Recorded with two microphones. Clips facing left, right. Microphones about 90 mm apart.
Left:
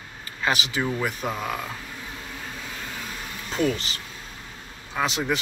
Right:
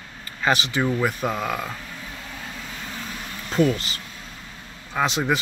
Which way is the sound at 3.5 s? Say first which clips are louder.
Right 4 dB; centre (ahead or behind).